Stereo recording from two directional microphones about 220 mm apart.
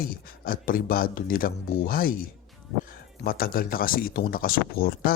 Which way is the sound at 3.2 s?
40° left (ahead or behind).